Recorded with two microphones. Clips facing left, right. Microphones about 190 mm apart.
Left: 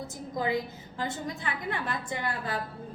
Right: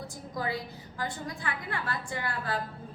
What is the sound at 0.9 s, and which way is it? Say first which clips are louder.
A woman's voice: left 2 dB; 25° left (ahead or behind).